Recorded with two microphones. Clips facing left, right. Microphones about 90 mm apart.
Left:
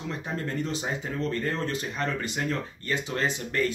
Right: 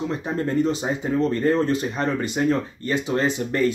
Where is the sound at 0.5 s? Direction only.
20° right (ahead or behind).